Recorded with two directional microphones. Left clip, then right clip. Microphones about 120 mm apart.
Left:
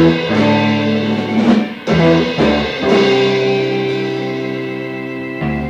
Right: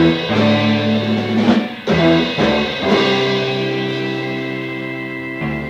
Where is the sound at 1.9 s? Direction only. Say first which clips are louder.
Left 1 dB; 25° right (ahead or behind).